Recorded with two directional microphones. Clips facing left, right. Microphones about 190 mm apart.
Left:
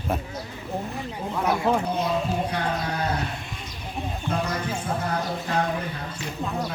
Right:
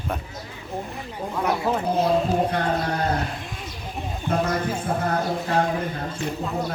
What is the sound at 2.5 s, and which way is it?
Speech, 50° right (ahead or behind).